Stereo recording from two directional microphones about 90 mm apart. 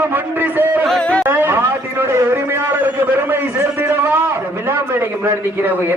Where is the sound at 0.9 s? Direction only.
10° left (ahead or behind).